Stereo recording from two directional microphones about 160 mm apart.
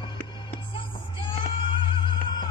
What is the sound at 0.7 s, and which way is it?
Music, 35° left (ahead or behind).